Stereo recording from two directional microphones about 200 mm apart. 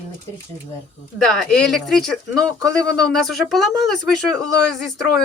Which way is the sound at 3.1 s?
Centre (ahead or behind).